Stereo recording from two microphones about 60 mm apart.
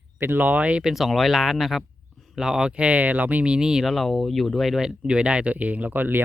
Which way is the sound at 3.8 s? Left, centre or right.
Centre.